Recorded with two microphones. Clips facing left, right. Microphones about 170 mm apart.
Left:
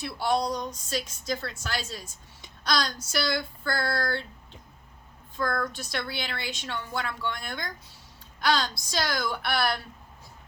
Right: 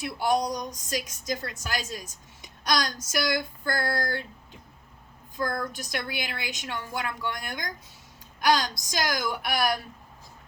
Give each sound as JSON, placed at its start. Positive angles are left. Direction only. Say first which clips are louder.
{"t": 0.0, "sound": "speech", "louder": "right 1 dB", "side_deg": -15}
{"t": 2.4, "sound": "a sound", "louder": "right 1 dB", "side_deg": -15}
{"t": 3.2, "sound": "speech", "louder": "right 1 dB", "side_deg": -15}
{"t": 5.4, "sound": "a woman's voice", "louder": "left 1 dB", "side_deg": -15}